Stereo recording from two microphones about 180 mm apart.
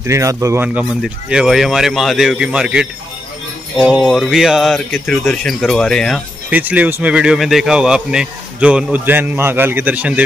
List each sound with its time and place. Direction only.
0.0 s speech: 15° right (ahead or behind); by 6.2 s centre (ahead or behind)
6.5 s speech: 10° right (ahead or behind)